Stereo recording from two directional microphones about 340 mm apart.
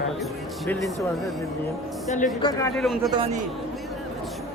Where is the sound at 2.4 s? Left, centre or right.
Centre.